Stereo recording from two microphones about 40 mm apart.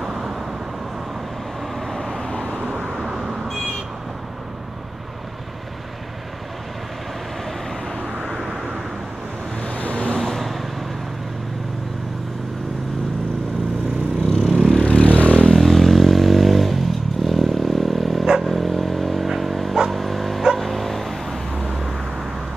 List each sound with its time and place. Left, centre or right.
0.0 s vehicle: centre
1.9 s vehicle: centre
2.1 s vehicle: left
2.6 s vehicle: right
3.0 s vehicle: centre
8.2 s vehicle: centre
9.8 s vehicle: left
10.1 s vehicle: centre
14.3 s vehicle: centre
14.9 s vehicle: left
15.4 s vehicle: centre
19.2 s dog: centre